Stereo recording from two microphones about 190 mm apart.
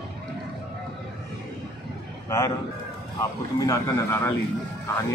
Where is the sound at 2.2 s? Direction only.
15° left (ahead or behind).